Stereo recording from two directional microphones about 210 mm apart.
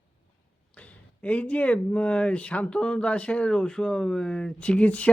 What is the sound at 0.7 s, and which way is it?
Speech, 5° left (ahead or behind).